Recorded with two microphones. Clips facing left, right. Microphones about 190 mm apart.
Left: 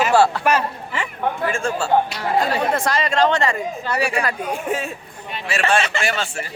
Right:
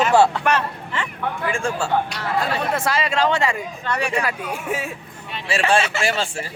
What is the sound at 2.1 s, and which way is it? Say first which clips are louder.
Speech: left 3 dB; 15° left (ahead or behind).